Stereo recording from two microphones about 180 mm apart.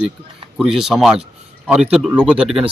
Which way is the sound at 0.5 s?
5° right (ahead or behind).